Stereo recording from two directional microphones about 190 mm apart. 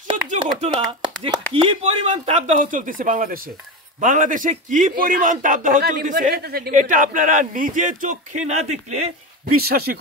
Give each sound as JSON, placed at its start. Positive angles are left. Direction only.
{"t": 0.4, "sound": "a man's voice", "side_deg": -25}
{"t": 6.7, "sound": "a man's voice", "side_deg": -40}
{"t": 9.6, "sound": "speech", "side_deg": -55}